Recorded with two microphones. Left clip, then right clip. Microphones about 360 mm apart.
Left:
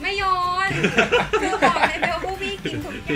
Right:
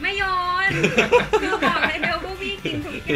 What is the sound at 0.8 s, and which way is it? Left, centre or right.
Speech, centre.